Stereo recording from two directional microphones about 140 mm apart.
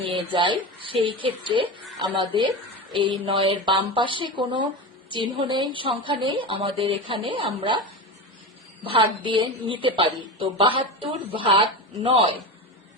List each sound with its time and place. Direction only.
0.0 s a man's voice: 35° right (ahead or behind)